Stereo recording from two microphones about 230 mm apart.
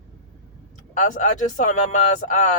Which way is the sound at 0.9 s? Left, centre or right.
Left.